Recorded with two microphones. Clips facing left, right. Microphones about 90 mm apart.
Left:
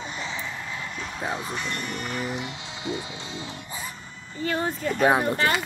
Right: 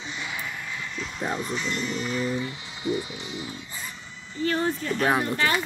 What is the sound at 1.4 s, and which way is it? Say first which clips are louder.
Speech: right 2 dB; 50° left (ahead or behind).